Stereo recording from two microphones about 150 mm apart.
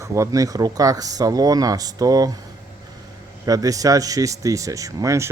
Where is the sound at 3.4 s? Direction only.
25° right (ahead or behind).